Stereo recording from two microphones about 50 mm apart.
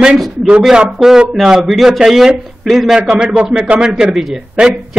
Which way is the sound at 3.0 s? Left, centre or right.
Centre.